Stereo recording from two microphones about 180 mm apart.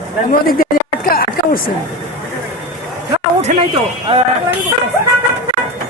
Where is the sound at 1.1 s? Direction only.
55° left (ahead or behind).